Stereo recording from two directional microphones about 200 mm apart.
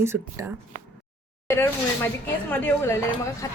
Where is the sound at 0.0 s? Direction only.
15° right (ahead or behind).